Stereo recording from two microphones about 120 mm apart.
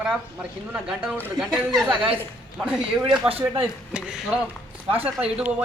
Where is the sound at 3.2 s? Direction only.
50° right (ahead or behind).